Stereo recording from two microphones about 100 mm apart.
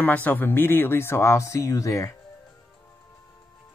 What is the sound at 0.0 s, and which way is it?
Speech, 15° left (ahead or behind).